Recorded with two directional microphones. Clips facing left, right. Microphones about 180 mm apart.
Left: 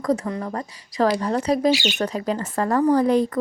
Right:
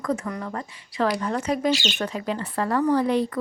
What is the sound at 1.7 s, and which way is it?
Speech, 10° left (ahead or behind).